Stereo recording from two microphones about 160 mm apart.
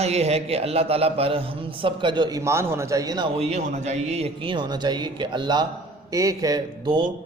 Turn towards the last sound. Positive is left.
turn(degrees=-25)  # may be behind; listen again after turning